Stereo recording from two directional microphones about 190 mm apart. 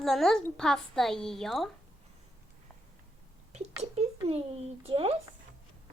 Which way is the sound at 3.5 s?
35° right (ahead or behind).